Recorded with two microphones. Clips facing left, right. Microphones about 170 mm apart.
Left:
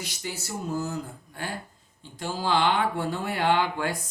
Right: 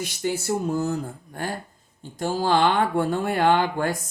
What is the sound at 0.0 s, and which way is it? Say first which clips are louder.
Speech: right 9 dB; 50° right (ahead or behind).